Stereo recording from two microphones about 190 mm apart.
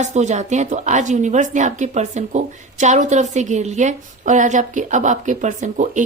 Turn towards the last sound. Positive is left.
turn(degrees=-40)  # may be behind; listen again after turning